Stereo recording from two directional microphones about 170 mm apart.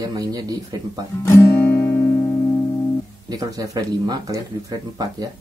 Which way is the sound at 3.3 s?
20° right (ahead or behind).